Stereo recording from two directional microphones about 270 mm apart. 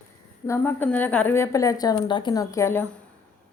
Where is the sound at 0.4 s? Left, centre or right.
Centre.